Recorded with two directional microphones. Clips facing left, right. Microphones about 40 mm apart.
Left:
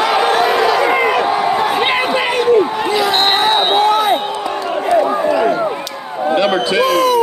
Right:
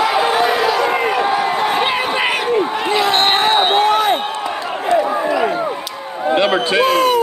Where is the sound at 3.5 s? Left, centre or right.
Centre.